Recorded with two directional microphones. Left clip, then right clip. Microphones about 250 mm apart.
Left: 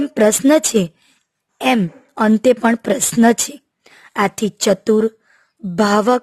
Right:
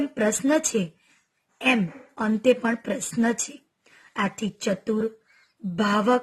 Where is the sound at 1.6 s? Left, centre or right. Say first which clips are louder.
Left 6 dB; left.